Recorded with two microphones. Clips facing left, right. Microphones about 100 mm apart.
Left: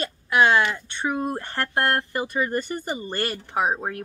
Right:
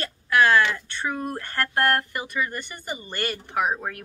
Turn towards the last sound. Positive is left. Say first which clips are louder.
# left 1 dB
turn(degrees=25)  # may be behind; listen again after turning